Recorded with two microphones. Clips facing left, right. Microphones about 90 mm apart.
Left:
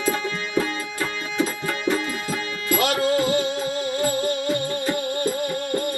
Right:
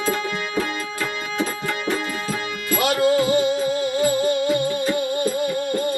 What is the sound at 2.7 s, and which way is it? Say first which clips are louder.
Music: right 2 dB; 20° right (ahead or behind).